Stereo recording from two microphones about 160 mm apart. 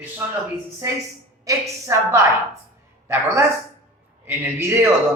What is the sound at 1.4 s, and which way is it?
Speech, 20° right (ahead or behind).